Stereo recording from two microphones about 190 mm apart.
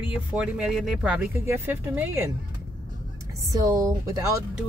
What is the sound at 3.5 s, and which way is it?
Speech, 20° right (ahead or behind).